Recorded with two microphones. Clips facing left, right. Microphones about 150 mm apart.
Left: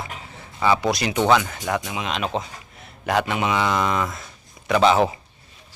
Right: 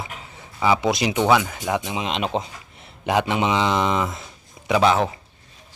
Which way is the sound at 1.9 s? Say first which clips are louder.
Right 1 dB; 25° right (ahead or behind).